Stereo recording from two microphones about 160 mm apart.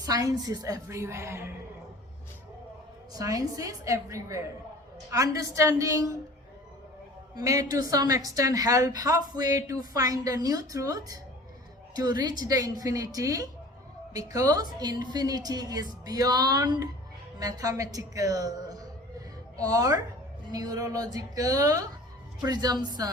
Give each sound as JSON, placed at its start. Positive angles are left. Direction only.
{"t": 0.0, "sound": "a woman's voice", "side_deg": -20}
{"t": 3.1, "sound": "a woman's voice", "side_deg": -20}
{"t": 7.3, "sound": "a woman's voice", "side_deg": -20}